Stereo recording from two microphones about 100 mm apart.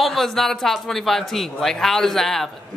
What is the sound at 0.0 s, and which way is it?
Speech, centre (ahead or behind).